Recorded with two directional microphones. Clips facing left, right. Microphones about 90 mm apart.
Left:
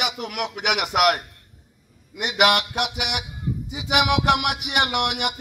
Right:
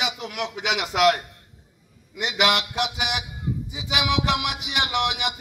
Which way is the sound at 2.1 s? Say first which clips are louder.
Left 3 dB; 55° left (ahead or behind).